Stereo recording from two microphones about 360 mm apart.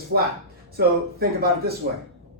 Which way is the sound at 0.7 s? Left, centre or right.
Right.